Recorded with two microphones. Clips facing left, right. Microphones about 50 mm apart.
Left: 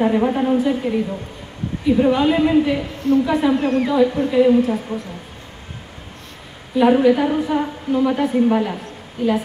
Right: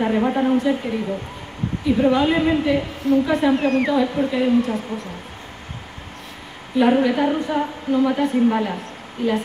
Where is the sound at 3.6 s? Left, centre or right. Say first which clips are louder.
Even; right.